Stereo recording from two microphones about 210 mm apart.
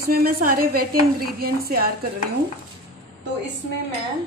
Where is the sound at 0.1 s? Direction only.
45° right (ahead or behind).